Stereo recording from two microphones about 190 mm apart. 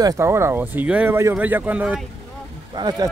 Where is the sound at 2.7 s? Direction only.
20° right (ahead or behind).